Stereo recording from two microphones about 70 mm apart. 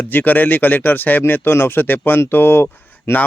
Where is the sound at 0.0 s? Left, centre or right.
Left.